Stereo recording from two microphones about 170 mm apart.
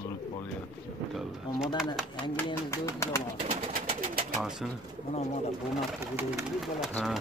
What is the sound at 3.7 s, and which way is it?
Bird, 55° right (ahead or behind).